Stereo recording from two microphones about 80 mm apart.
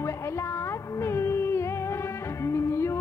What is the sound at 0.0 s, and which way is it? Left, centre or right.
Music, left.